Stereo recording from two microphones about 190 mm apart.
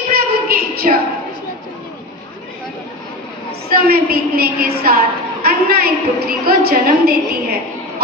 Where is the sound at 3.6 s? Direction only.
50° right (ahead or behind).